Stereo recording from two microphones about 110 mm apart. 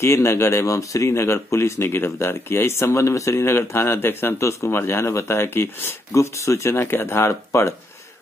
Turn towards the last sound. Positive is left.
turn(degrees=25)  # may be behind; listen again after turning